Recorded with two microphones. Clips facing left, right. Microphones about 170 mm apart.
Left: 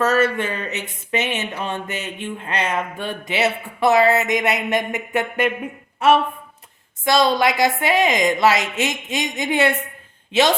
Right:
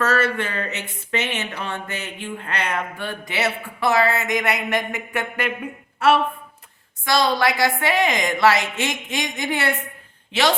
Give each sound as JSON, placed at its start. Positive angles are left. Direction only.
{"t": 0.0, "sound": "speech", "side_deg": 20}
{"t": 7.0, "sound": "speech", "side_deg": 20}